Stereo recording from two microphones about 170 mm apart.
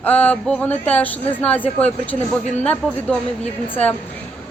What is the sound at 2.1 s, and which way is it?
Speech, 40° left (ahead or behind).